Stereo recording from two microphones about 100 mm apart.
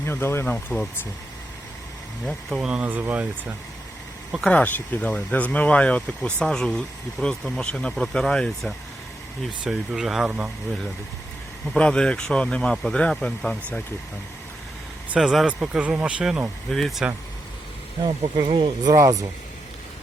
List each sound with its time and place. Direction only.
0.0 s speech: 25° left (ahead or behind)
2.5 s speech: 10° right (ahead or behind)
4.4 s speech: 10° left (ahead or behind); by 10.5 s 10° right (ahead or behind)
11.8 s speech: 10° left (ahead or behind)
15.1 s speech: 5° right (ahead or behind)
18.3 s speech: 50° right (ahead or behind)
18.9 s speech: 35° right (ahead or behind)